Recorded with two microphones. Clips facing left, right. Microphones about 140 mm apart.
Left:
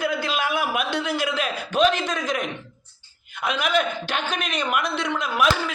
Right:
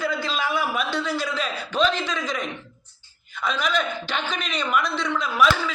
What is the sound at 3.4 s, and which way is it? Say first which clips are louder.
A man's voice: left 2 dB; 60° left (ahead or behind).